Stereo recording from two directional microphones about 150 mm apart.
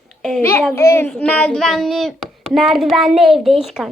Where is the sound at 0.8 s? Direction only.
15° left (ahead or behind).